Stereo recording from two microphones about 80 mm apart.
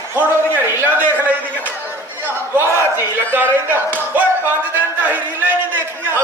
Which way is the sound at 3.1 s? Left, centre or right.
Right.